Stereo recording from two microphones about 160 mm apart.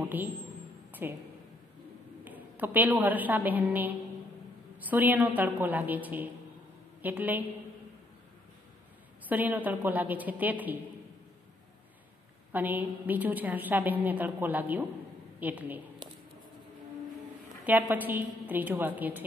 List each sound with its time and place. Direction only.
0.1 s a woman's voice: 10° right (ahead or behind)
2.2 s a woman's voice: 10° right (ahead or behind)
9.3 s a woman's voice: 10° right (ahead or behind)
12.5 s a woman's voice: 10° right (ahead or behind)
17.6 s a woman's voice: 10° right (ahead or behind)